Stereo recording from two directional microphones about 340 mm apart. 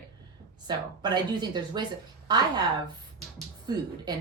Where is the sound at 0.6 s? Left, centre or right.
Centre.